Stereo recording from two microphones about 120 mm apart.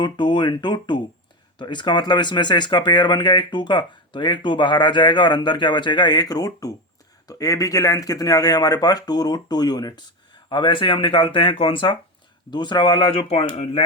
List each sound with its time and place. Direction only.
0.0 s speech: 40° left (ahead or behind); by 13.8 s 55° left (ahead or behind)